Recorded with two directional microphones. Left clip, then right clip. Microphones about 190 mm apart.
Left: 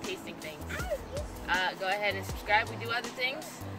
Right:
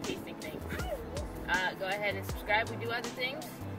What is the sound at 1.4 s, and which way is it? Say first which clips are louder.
Speech: left 2 dB; 20° right (ahead or behind).